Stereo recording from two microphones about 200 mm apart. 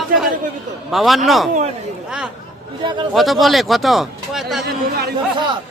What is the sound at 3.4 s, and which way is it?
Speech, centre (ahead or behind).